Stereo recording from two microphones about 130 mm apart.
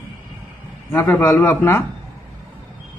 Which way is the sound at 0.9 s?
20° left (ahead or behind).